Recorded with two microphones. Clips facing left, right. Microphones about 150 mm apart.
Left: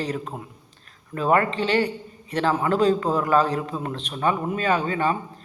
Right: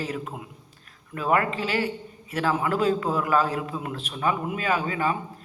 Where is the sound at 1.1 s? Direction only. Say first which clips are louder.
Left 3 dB; 35° left (ahead or behind).